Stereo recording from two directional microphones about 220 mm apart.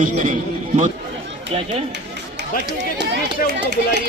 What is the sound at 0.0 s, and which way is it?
Speech, 35° right (ahead or behind).